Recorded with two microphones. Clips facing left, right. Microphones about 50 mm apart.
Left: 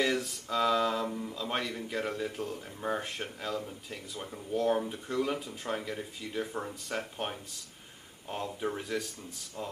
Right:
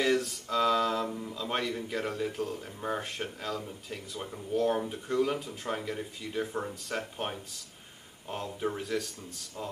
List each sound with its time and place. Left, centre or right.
0.0 s speech: centre